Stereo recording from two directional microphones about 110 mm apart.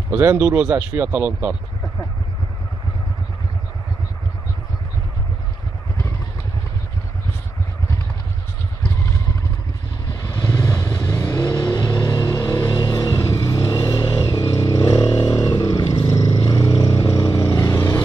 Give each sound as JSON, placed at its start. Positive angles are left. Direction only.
{"t": 0.1, "sound": "speech", "side_deg": -20}
{"t": 10.2, "sound": "vehicle", "side_deg": 30}
{"t": 15.8, "sound": "vehicle", "side_deg": 55}
{"t": 16.1, "sound": "vehicle", "side_deg": 30}